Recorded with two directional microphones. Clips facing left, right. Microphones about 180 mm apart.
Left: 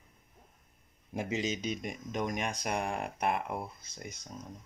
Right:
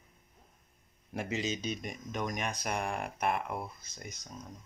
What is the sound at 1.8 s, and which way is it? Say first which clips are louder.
Speech: left 2 dB; 20° left (ahead or behind).